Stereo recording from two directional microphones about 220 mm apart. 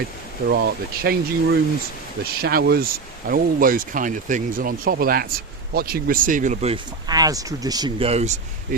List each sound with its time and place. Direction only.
0.4 s speech: 45° right (ahead or behind)
7.1 s speech: 15° right (ahead or behind)